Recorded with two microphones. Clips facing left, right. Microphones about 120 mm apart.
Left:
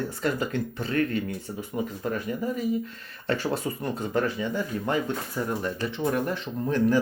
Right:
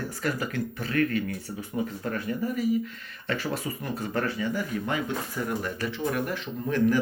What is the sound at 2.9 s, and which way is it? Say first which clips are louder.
Speech: left 3 dB; 35° left (ahead or behind).